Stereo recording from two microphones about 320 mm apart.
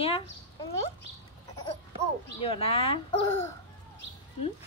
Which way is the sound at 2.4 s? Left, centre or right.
Centre.